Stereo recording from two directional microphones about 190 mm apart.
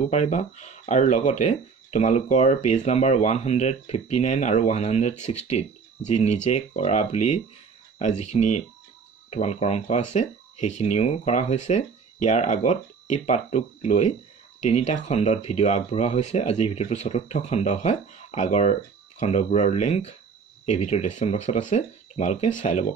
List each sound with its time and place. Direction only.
0.1 s speech: 35° left (ahead or behind)